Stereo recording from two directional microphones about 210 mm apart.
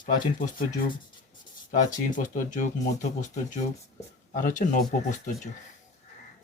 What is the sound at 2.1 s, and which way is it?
Speech, 40° left (ahead or behind).